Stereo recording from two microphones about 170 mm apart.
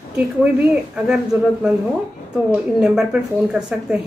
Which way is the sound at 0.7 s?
5° right (ahead or behind).